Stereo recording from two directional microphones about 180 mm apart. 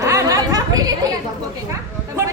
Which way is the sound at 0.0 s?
20° right (ahead or behind).